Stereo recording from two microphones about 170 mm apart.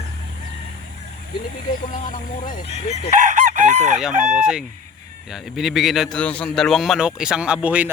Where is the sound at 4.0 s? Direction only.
5° right (ahead or behind).